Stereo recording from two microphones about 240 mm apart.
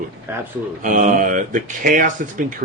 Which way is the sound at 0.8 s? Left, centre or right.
Right.